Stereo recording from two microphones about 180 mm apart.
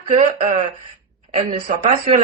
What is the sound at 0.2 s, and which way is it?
Speech, 40° right (ahead or behind).